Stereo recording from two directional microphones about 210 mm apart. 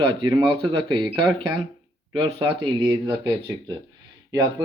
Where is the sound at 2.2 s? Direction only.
25° right (ahead or behind).